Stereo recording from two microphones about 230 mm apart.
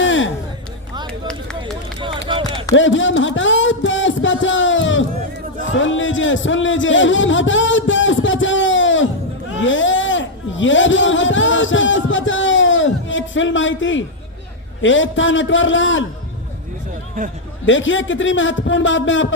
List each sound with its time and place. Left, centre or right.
0.0 s music: left
1.3 s run: centre
2.3 s a sound: right
2.7 s a sound: left
5.7 s a man's voice: left
17.2 s speech: right
17.7 s a man's voice: left